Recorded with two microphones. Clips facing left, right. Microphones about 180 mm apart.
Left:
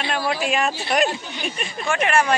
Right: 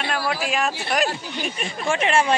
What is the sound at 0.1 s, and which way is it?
Speech, centre (ahead or behind).